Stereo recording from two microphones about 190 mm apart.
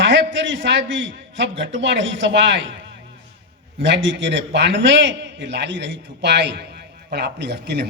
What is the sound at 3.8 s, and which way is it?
A man's voice, 70° right (ahead or behind).